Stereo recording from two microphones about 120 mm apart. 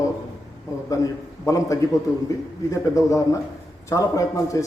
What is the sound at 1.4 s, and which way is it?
A man's voice, 25° left (ahead or behind).